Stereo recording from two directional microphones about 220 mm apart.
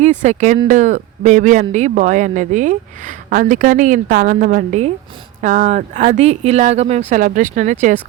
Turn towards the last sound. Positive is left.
turn(degrees=-35)  # may be behind; listen again after turning